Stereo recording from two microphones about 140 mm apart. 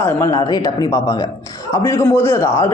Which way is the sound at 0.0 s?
20° left (ahead or behind).